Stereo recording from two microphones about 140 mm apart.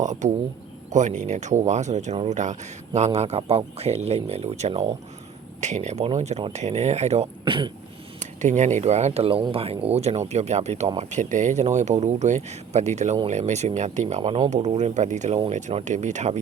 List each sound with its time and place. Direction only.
0.0 s speech: 60° right (ahead or behind)
7.4 s speech: 35° right (ahead or behind)
8.2 s speech: 60° right (ahead or behind)